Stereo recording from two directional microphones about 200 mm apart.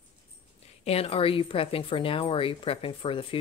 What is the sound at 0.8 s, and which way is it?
A woman's voice, 30° left (ahead or behind).